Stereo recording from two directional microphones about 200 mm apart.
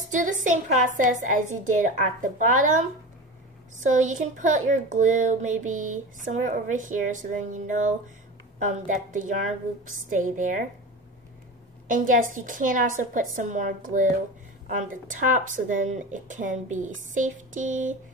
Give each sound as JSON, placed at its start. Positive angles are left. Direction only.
{"t": 0.1, "sound": "speech", "side_deg": -40}
{"t": 11.9, "sound": "speech", "side_deg": -40}